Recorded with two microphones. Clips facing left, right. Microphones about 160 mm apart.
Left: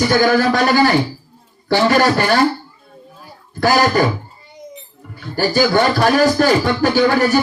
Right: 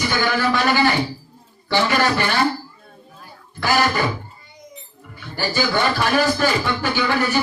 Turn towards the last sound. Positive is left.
turn(degrees=40)  # may be behind; listen again after turning